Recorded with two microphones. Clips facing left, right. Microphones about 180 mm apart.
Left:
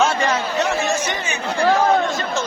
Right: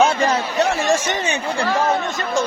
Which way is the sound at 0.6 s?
35° right (ahead or behind).